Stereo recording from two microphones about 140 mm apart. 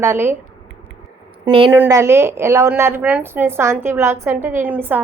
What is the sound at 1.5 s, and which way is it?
Speech, 35° right (ahead or behind).